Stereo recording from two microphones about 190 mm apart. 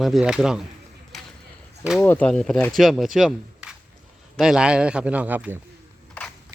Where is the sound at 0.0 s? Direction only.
Centre (ahead or behind).